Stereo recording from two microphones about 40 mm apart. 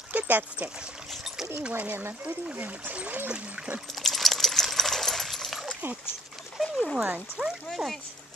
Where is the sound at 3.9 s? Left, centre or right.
Centre.